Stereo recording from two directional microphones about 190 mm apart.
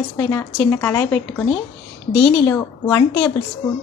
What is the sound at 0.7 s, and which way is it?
A woman's voice, 15° left (ahead or behind).